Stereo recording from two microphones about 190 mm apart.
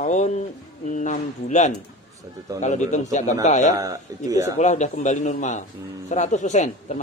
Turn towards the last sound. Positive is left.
turn(degrees=40)  # may be behind; listen again after turning